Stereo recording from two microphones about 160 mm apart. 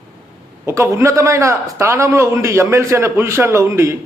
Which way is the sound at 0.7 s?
20° right (ahead or behind).